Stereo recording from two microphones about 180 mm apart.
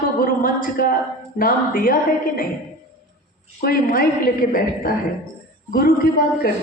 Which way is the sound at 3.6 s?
55° left (ahead or behind).